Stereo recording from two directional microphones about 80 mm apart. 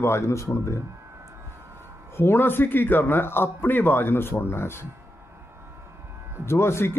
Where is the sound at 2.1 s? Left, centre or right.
Left.